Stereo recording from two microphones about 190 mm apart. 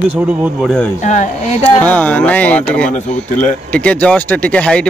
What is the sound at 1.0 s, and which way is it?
Speech, 40° left (ahead or behind).